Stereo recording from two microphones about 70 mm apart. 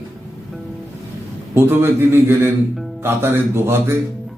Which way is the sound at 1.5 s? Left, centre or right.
Right.